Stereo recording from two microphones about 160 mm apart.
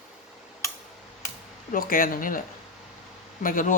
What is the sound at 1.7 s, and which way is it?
Speech, 60° left (ahead or behind).